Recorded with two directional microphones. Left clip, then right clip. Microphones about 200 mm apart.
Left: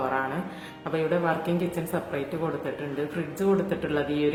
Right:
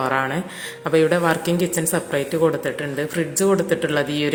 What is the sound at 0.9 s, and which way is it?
Speech, 40° right (ahead or behind).